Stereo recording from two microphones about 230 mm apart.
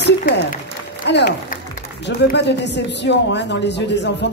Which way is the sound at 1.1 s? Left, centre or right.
Left.